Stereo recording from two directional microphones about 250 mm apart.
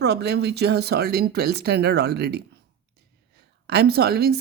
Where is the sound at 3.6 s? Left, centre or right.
Right.